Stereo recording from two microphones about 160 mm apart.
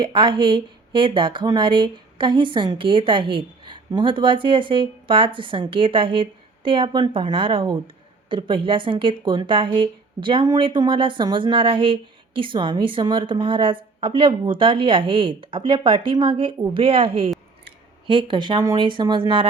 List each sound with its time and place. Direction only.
0.0 s a woman's voice: 30° right (ahead or behind)